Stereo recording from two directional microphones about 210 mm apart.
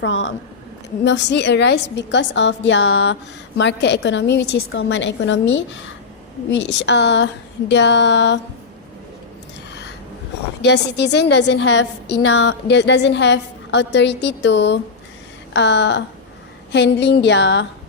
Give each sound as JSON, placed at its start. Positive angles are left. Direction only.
{"t": 0.0, "sound": "a woman's voice", "side_deg": 65}
{"t": 10.6, "sound": "a woman's voice", "side_deg": 55}